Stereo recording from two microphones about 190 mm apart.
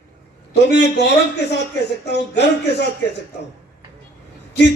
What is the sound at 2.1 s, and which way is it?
Speech, 65° left (ahead or behind).